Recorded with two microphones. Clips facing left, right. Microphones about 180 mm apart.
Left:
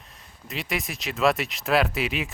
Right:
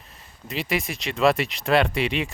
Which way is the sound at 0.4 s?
Centre (ahead or behind).